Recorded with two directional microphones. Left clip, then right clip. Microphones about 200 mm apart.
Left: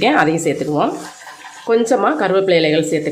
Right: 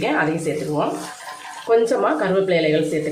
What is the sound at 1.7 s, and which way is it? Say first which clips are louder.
Speech: left 3 dB; 50° left (ahead or behind).